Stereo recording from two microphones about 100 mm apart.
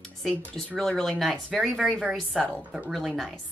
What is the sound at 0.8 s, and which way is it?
Speech, 5° left (ahead or behind).